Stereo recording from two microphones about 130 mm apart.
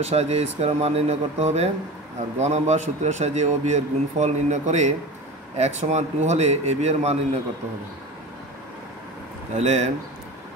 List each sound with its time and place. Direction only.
0.0 s a man's voice: 55° right (ahead or behind)
9.6 s a man's voice: 60° right (ahead or behind)